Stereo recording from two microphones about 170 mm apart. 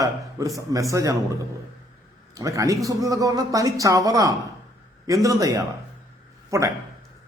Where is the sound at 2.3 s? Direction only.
20° right (ahead or behind).